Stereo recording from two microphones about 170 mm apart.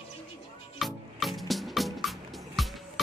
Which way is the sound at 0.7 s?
Centre (ahead or behind).